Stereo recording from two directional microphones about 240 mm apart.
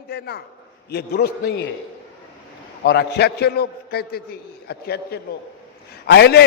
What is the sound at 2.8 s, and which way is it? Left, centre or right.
A man's voice, left.